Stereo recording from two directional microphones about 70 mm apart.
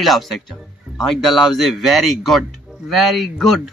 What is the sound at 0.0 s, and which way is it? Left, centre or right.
Speech, centre.